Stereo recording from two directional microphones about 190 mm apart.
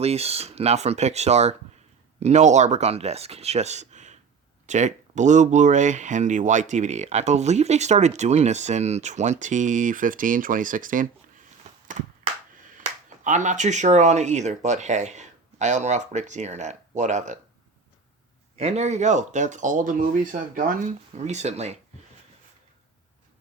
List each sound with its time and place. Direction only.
0.0 s speech: 35° right (ahead or behind)
11.6 s a sound: 40° right (ahead or behind)
12.7 s speech: 40° right (ahead or behind)
18.5 s speech: 35° right (ahead or behind)